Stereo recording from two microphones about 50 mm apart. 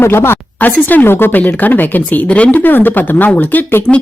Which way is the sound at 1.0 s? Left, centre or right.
Left.